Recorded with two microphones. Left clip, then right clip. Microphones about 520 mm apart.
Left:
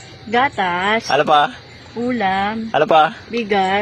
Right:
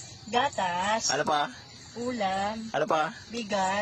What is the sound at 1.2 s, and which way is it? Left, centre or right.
Speech, right.